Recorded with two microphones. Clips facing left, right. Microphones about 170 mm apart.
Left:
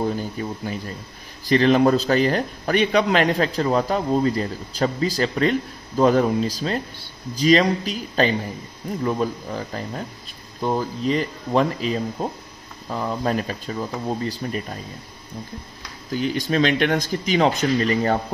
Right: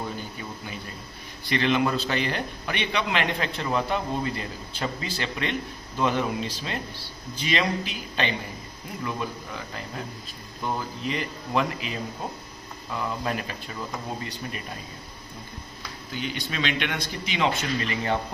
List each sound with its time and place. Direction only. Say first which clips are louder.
0.0 s speech: left 9 dB; 40° left (ahead or behind)
16.1 s speech: left 10 dB; 40° left (ahead or behind)